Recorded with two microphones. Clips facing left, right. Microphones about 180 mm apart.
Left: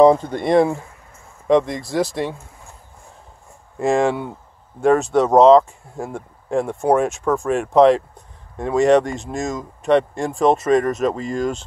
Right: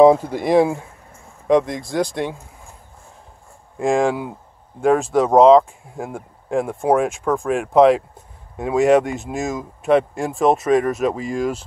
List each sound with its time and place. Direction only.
0.0 s speech: 5° right (ahead or behind)
3.7 s speech: centre (ahead or behind)